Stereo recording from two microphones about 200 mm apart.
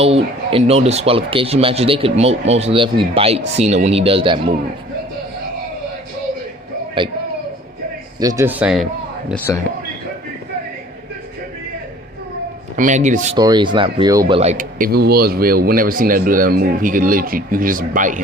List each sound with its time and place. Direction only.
0.0 s speech: 30° right (ahead or behind)
7.0 s speech: 25° right (ahead or behind)
8.2 s speech: 15° right (ahead or behind)
12.7 s speech: 40° right (ahead or behind)
13.3 s speech: 20° right (ahead or behind)
14.3 s speech: 35° right (ahead or behind)